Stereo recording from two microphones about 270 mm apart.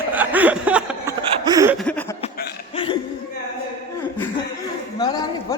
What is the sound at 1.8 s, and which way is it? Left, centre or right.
Chuckle, centre.